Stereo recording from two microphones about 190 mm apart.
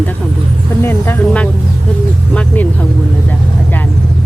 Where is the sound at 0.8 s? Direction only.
10° left (ahead or behind).